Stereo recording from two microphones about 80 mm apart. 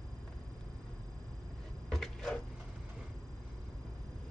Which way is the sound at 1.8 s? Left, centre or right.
Centre.